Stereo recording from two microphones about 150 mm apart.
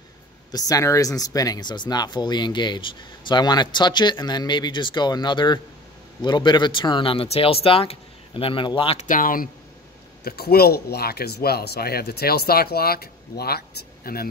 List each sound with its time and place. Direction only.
0.5 s speech: 25° left (ahead or behind)
9.0 s speech: 65° left (ahead or behind)
10.2 s speech: 90° left